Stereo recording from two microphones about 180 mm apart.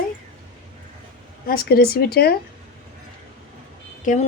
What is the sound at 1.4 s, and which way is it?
Speech, 55° left (ahead or behind).